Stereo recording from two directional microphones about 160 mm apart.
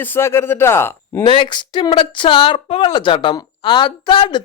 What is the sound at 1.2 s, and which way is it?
A woman's voice, 30° left (ahead or behind).